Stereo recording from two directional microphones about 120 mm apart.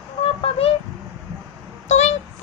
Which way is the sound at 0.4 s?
55° left (ahead or behind).